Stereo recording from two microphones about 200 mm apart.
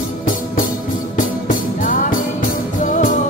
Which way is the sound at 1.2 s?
40° left (ahead or behind).